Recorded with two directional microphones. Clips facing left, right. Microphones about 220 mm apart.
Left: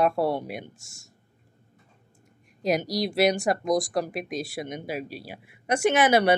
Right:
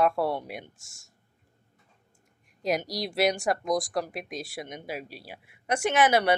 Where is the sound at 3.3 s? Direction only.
20° left (ahead or behind).